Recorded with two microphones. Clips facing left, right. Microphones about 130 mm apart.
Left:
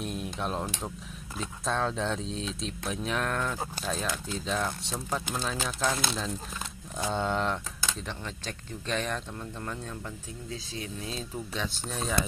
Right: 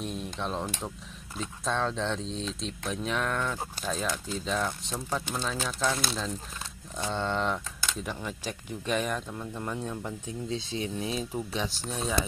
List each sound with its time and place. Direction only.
0.0 s speech: 5° left (ahead or behind); by 11.7 s 15° right (ahead or behind)
11.9 s speech: 5° right (ahead or behind)